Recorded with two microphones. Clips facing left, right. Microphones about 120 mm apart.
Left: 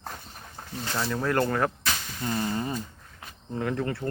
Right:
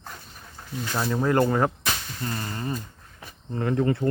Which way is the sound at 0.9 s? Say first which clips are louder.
Right 4 dB; 20° right (ahead or behind).